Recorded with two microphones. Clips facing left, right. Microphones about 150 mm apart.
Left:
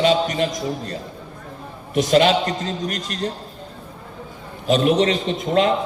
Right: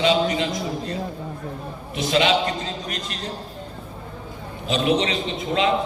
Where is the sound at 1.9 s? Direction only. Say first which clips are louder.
Left 4 dB; 45° left (ahead or behind).